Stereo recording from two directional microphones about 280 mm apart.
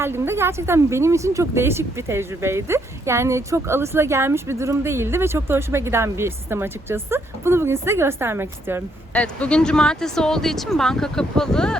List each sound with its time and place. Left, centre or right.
0.0 s speech: centre
9.1 s speech: centre